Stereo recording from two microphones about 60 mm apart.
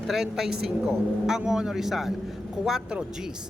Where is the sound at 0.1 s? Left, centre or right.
Centre.